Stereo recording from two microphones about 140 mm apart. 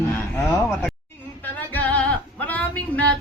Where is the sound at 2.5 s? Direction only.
10° left (ahead or behind).